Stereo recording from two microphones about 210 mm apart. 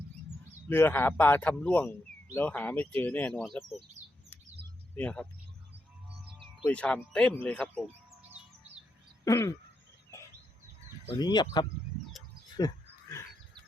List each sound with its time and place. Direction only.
0.7 s speech: 10° left (ahead or behind)
4.9 s speech: 5° left (ahead or behind)
6.7 s speech: 5° left (ahead or behind)
9.2 s speech: 15° left (ahead or behind)
11.2 s speech: 20° left (ahead or behind)
12.5 s a sound: 15° left (ahead or behind)